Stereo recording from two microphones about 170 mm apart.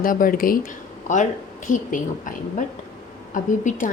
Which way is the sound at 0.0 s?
55° left (ahead or behind).